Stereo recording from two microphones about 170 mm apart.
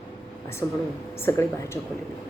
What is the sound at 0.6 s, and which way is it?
Speech, 15° left (ahead or behind).